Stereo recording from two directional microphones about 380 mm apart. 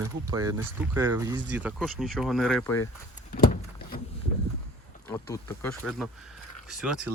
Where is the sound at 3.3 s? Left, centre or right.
Left.